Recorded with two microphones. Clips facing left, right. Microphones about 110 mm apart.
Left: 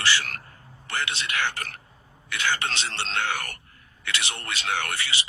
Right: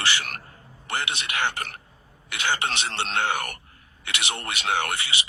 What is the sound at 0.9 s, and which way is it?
Speech, 15° right (ahead or behind).